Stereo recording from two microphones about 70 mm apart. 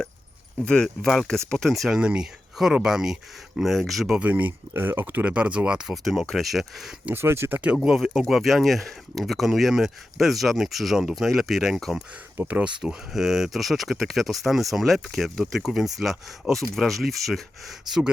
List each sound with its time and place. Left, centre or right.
0.6 s speech: centre
2.0 s speech: centre
4.2 s speech: right
5.2 s speech: centre
6.2 s speech: centre
7.1 s speech: right
7.5 s speech: centre
7.8 s speech: centre
12.4 s speech: right; by 18.0 s centre